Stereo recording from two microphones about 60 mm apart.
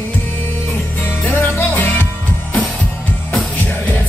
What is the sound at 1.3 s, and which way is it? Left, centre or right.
Music, left.